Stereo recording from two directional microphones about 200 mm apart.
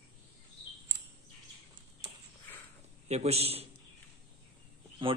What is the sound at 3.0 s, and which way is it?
Speech, 30° right (ahead or behind).